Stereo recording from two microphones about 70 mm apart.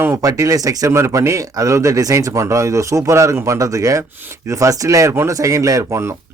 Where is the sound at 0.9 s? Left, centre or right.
Right.